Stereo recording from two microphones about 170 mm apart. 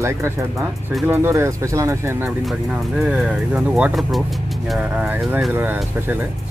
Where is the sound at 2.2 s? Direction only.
5° right (ahead or behind).